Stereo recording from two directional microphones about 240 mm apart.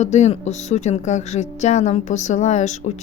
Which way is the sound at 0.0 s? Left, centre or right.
Left.